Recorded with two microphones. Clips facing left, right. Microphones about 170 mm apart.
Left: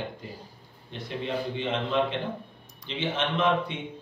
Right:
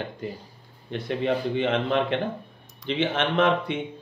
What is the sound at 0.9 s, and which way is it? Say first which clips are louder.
Speech: right 6 dB; 65° right (ahead or behind).